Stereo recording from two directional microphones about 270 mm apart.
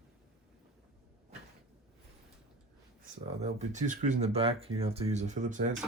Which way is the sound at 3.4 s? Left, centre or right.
Right.